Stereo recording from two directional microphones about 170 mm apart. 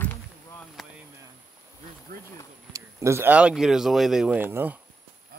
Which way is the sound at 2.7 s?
15° right (ahead or behind).